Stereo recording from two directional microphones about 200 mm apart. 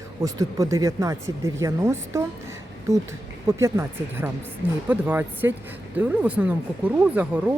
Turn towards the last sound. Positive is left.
turn(degrees=-10)  # may be behind; listen again after turning